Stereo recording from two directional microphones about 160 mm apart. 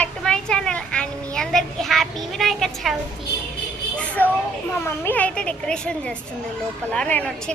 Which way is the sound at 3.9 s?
10° left (ahead or behind).